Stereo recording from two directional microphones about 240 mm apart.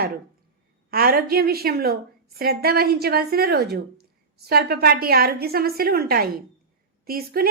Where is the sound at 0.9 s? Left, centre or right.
Right.